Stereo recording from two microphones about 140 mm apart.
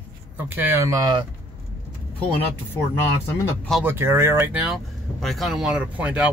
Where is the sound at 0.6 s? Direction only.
15° right (ahead or behind).